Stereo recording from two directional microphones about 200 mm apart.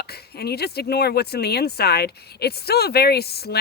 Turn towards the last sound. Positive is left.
turn(degrees=50)  # may be behind; listen again after turning